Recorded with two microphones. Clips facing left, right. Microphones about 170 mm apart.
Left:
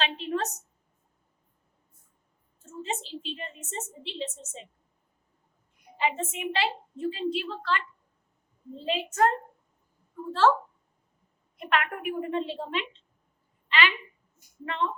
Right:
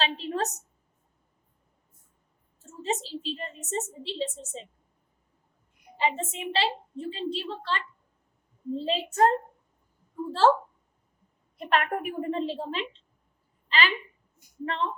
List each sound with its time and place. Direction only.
0.0 s a sound: 35° right (ahead or behind)
2.6 s a woman's voice: 40° right (ahead or behind)
6.0 s a woman's voice: 35° right (ahead or behind)
8.8 s a woman's voice: 35° right (ahead or behind)
11.5 s a woman's voice: 35° right (ahead or behind)
13.7 s a sound: 35° right (ahead or behind)
14.6 s a woman's voice: 35° right (ahead or behind)